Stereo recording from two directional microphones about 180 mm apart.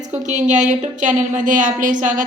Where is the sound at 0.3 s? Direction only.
40° right (ahead or behind).